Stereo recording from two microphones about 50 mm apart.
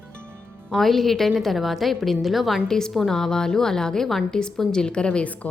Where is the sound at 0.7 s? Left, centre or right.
Centre.